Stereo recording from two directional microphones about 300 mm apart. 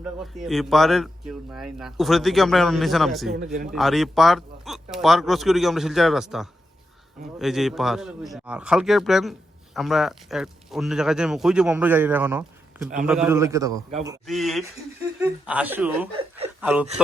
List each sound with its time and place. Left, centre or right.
0.0 s speech: centre
3.3 s a man's voice: right
3.7 s a man's voice: centre
14.3 s speech: centre